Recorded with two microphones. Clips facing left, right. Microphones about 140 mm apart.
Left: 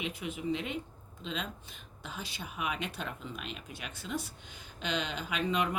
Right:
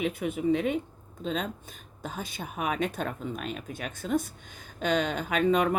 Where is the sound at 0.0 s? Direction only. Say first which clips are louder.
Right 8 dB; 55° right (ahead or behind).